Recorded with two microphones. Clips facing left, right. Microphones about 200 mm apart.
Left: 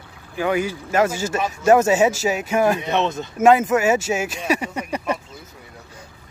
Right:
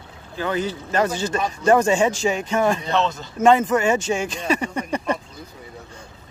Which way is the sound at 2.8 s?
20° left (ahead or behind).